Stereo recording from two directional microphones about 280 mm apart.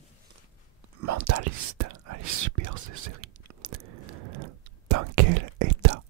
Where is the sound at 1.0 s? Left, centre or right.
Right.